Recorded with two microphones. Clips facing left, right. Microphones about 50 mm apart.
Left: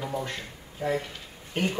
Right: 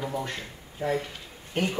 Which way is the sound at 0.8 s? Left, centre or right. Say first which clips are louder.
Even; right.